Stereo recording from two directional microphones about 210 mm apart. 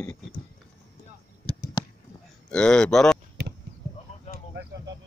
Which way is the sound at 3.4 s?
50° right (ahead or behind).